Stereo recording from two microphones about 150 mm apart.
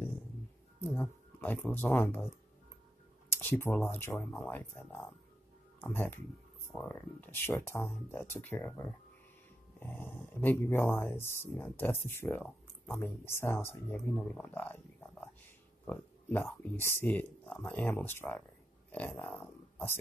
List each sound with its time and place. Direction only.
0.7 s speech: 10° left (ahead or behind)
3.3 s speech: 15° left (ahead or behind)